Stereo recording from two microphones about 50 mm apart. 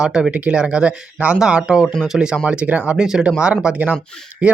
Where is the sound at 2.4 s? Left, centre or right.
Right.